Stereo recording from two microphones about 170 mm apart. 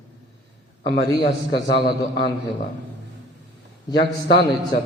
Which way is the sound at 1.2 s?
75° left (ahead or behind).